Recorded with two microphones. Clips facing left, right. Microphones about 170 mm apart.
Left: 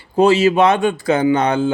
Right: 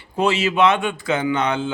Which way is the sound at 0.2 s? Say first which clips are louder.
Left 6 dB; 35° left (ahead or behind).